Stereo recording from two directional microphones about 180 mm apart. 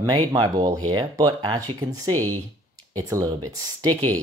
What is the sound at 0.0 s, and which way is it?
Speech, 20° right (ahead or behind).